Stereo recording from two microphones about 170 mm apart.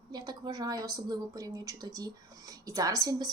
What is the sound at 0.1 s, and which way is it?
Speech, 25° right (ahead or behind).